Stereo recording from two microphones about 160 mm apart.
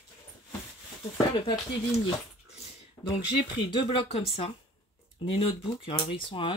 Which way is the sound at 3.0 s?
10° left (ahead or behind).